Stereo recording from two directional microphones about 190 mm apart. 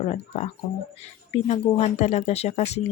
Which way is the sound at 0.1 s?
35° left (ahead or behind).